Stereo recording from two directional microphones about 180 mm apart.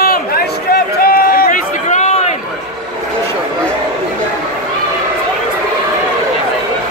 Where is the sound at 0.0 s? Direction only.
55° left (ahead or behind).